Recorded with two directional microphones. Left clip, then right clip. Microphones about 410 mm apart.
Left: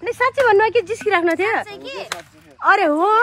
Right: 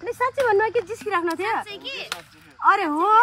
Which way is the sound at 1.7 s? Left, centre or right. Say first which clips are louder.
Left 2 dB; centre.